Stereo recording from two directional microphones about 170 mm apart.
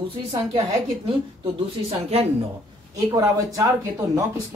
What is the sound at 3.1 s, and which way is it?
Speech, 20° right (ahead or behind).